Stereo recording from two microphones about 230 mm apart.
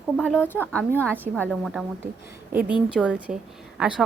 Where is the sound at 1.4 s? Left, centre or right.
Centre.